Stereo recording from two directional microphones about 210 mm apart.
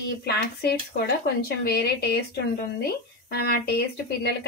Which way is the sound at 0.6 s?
45° left (ahead or behind).